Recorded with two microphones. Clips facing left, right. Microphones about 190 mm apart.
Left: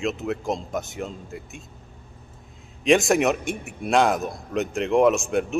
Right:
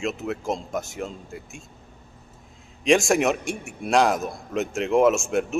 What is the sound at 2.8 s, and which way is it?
A man's voice, centre (ahead or behind).